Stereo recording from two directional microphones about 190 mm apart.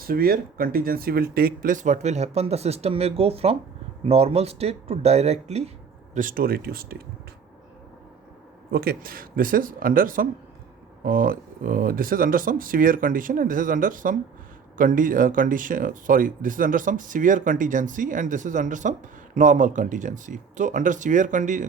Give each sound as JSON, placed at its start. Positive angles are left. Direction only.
{"t": 0.0, "sound": "speech", "side_deg": -50}
{"t": 6.1, "sound": "speech", "side_deg": -45}
{"t": 8.7, "sound": "speech", "side_deg": -50}